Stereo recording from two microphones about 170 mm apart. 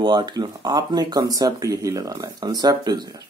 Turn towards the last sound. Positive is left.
turn(degrees=-25)  # may be behind; listen again after turning